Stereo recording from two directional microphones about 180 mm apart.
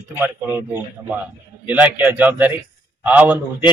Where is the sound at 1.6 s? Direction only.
10° right (ahead or behind).